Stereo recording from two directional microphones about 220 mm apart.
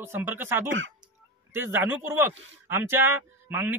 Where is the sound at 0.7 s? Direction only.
55° right (ahead or behind).